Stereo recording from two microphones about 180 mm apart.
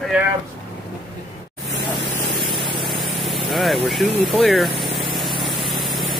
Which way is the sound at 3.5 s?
Centre (ahead or behind).